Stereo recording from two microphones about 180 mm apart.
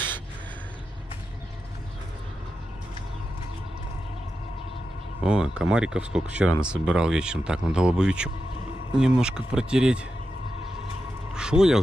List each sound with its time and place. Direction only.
5.2 s speech: 5° right (ahead or behind)
11.3 s vehicle: 5° right (ahead or behind)